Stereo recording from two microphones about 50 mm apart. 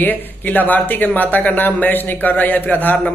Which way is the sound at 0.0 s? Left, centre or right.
Left.